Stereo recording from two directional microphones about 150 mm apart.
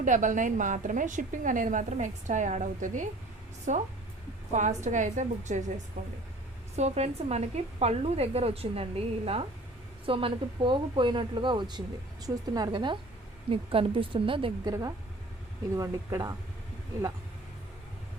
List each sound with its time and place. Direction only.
0.0 s a woman's voice: 55° right (ahead or behind); by 14.7 s 35° right (ahead or behind)
14.7 s a woman's voice: 25° right (ahead or behind)